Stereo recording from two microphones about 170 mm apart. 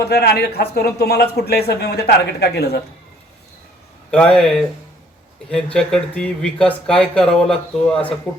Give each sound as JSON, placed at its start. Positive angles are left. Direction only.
{"t": 0.0, "sound": "speech", "side_deg": 70}
{"t": 4.1, "sound": "speech", "side_deg": 5}
{"t": 5.7, "sound": "speech", "side_deg": 5}